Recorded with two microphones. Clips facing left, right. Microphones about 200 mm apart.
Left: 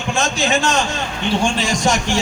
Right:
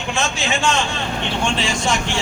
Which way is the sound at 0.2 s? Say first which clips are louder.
Left 4 dB; 40° left (ahead or behind).